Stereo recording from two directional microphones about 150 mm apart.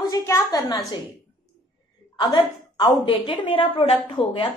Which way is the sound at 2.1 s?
30° left (ahead or behind).